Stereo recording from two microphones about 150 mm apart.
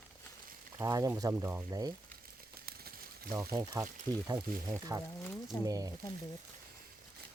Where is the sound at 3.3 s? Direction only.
25° right (ahead or behind).